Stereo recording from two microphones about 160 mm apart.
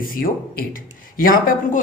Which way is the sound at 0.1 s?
60° left (ahead or behind).